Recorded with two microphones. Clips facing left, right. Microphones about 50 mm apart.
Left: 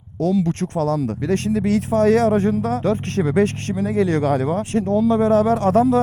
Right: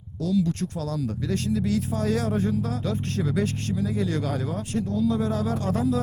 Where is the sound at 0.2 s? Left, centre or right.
Left.